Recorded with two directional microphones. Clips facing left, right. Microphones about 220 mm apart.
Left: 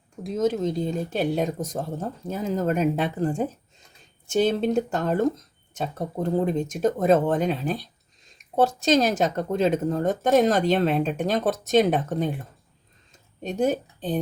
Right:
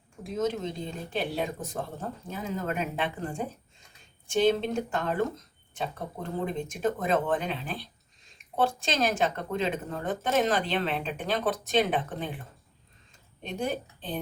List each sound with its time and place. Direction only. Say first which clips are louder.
0.2 s speech: left 6 dB; 40° left (ahead or behind)
6.4 s speech: left 3 dB; 40° left (ahead or behind)
13.4 s a woman's voice: left 8 dB; 45° left (ahead or behind)